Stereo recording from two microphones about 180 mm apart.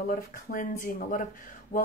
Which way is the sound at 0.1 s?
50° left (ahead or behind).